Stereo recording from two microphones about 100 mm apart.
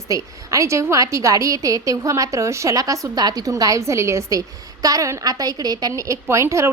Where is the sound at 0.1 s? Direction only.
30° right (ahead or behind).